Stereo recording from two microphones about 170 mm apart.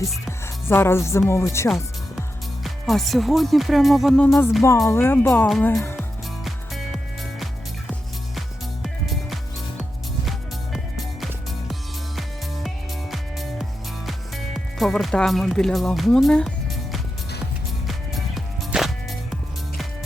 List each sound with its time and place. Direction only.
0.3 s music: 15° left (ahead or behind)
1.3 s speech: 15° left (ahead or behind)
2.6 s speech: centre (ahead or behind)
8.4 s music: centre (ahead or behind)
12.6 s music: centre (ahead or behind)
14.1 s speech: centre (ahead or behind)
17.8 s music: centre (ahead or behind)